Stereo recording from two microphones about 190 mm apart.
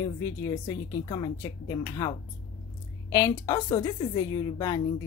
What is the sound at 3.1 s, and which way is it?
A woman's voice, 20° left (ahead or behind).